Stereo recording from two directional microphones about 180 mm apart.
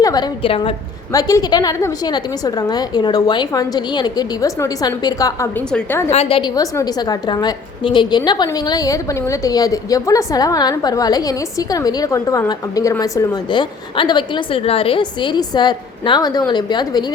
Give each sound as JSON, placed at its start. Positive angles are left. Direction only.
{"t": 0.0, "sound": "a woman's voice", "side_deg": 20}
{"t": 6.1, "sound": "a woman's voice", "side_deg": 35}